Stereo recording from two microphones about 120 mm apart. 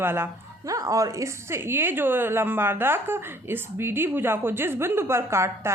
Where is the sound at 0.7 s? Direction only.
30° right (ahead or behind).